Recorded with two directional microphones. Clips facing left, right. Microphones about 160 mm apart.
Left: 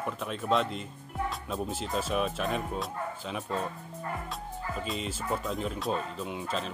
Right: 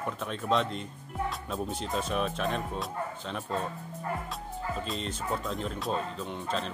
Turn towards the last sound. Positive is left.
turn(degrees=5)  # may be behind; listen again after turning